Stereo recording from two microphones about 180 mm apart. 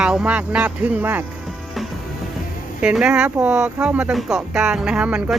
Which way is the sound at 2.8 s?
5° right (ahead or behind).